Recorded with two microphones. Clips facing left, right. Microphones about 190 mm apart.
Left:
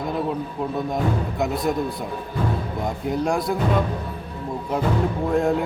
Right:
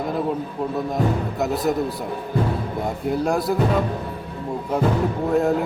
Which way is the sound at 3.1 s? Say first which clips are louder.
Right 1 dB; 5° right (ahead or behind).